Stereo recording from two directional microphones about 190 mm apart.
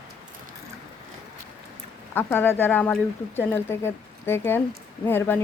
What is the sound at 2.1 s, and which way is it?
Speech, 10° left (ahead or behind).